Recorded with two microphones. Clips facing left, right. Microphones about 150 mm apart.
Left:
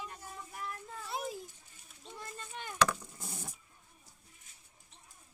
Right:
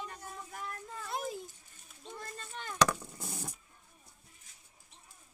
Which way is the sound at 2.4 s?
15° left (ahead or behind).